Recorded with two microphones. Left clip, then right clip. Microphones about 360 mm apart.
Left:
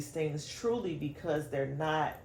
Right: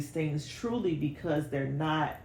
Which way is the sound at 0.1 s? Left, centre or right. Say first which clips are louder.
Even; centre.